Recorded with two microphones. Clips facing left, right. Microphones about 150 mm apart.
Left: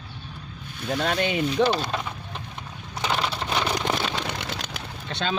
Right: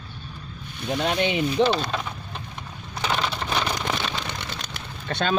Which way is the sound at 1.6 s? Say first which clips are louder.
Right 1 dB; 5° left (ahead or behind).